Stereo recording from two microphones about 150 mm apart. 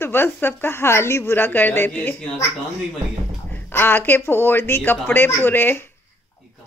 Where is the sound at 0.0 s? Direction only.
15° left (ahead or behind).